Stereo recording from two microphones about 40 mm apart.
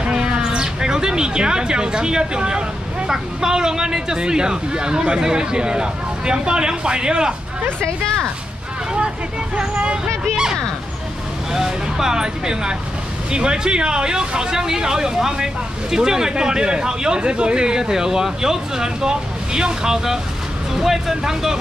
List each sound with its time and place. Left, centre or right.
0.0 s a sound: right
3.1 s speech: centre
11.5 s speech: centre